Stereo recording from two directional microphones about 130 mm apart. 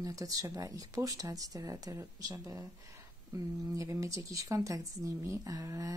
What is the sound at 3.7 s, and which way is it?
Speech, 25° right (ahead or behind).